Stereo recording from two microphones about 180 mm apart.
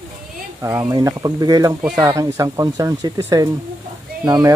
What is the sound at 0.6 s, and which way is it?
Speech, 20° right (ahead or behind).